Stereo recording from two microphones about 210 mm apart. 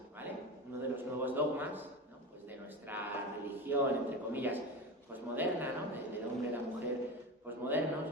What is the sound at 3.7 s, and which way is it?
A man's voice, 10° right (ahead or behind).